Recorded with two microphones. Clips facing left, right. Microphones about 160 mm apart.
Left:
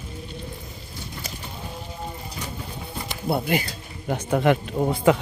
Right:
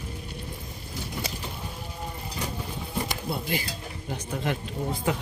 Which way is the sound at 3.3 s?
65° left (ahead or behind).